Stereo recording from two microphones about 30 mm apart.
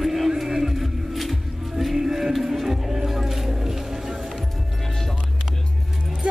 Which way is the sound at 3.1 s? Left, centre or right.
Centre.